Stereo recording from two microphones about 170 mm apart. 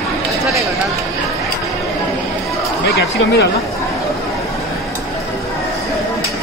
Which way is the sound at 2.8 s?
75° left (ahead or behind).